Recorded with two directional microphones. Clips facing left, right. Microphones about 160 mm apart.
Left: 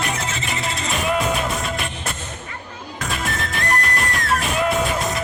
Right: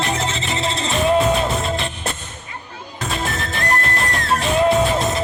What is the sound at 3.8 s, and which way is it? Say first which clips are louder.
Music: right 1 dB; 25° right (ahead or behind).